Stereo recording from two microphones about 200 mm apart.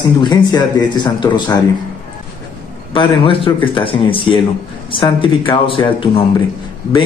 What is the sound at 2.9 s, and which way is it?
A man's voice, 25° left (ahead or behind).